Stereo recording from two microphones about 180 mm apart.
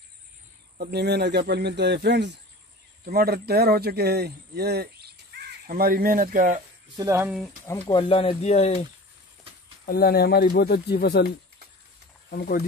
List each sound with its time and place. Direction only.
0.7 s speech: 65° right (ahead or behind)
3.1 s speech: 60° right (ahead or behind)
7.0 s speech: 15° right (ahead or behind)
7.6 s speech: 20° left (ahead or behind); by 8.8 s 35° left (ahead or behind)
9.8 s speech: 55° left (ahead or behind)
12.3 s speech: 55° left (ahead or behind)